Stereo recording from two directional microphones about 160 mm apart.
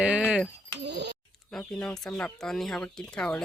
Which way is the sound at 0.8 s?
90° right.